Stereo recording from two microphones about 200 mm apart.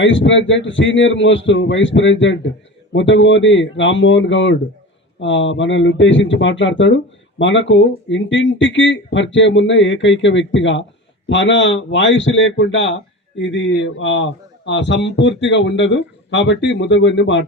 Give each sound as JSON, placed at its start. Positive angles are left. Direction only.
{"t": 0.0, "sound": "speech", "side_deg": 65}